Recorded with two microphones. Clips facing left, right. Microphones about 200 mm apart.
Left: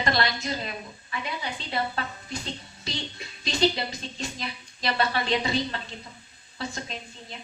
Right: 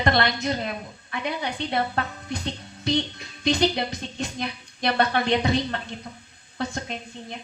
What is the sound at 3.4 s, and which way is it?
Speech, 55° right (ahead or behind).